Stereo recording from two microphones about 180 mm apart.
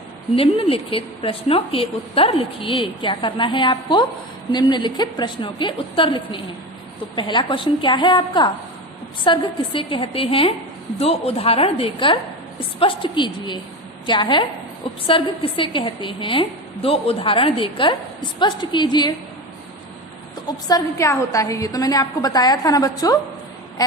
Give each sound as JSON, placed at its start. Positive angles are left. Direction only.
{"t": 0.3, "sound": "a woman's voice", "side_deg": 30}
{"t": 20.5, "sound": "a woman's voice", "side_deg": 20}